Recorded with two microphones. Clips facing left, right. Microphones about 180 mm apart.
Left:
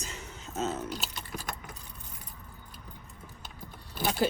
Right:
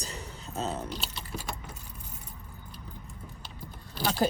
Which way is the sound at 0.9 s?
45° left (ahead or behind).